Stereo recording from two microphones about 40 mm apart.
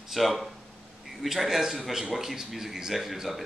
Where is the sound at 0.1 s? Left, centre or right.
Centre.